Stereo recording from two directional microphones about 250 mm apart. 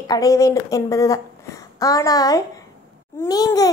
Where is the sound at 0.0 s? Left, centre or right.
Centre.